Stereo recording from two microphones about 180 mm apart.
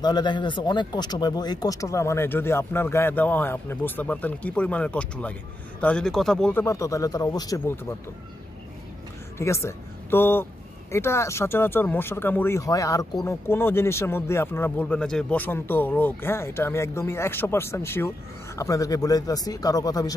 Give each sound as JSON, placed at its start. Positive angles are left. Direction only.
{"t": 0.0, "sound": "speech", "side_deg": 25}
{"t": 6.6, "sound": "speech", "side_deg": 15}
{"t": 9.4, "sound": "speech", "side_deg": 15}